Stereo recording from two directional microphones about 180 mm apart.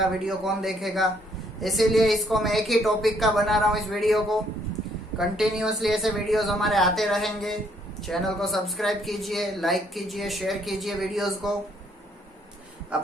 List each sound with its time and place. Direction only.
0.0 s speech: centre (ahead or behind)
12.9 s speech: 5° right (ahead or behind)